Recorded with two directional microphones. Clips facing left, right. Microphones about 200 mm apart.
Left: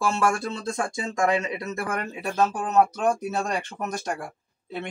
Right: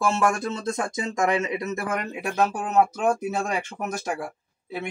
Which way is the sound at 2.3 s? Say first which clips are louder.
Even; 10° right (ahead or behind).